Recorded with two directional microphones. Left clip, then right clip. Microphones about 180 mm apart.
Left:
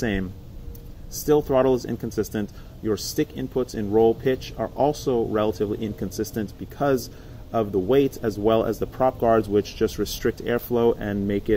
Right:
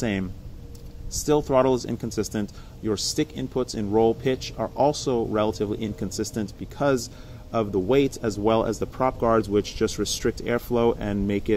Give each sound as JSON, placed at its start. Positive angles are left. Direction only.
{"t": 0.0, "sound": "speech", "side_deg": -15}